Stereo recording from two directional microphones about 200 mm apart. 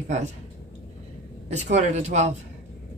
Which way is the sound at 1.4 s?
35° right (ahead or behind).